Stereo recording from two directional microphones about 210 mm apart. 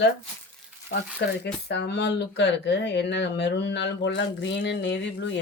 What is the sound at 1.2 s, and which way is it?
Speech, 55° left (ahead or behind).